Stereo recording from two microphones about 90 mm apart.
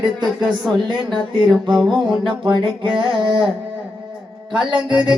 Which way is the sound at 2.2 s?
60° right (ahead or behind).